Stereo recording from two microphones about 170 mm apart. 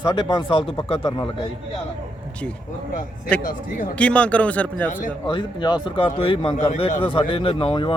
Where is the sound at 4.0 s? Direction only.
5° left (ahead or behind).